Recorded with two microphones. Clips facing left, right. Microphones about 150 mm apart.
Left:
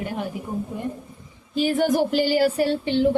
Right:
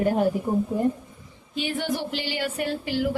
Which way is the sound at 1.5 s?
40° left (ahead or behind).